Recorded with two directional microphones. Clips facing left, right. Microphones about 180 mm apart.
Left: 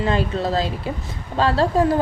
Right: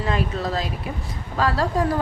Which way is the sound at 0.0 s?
30° left (ahead or behind).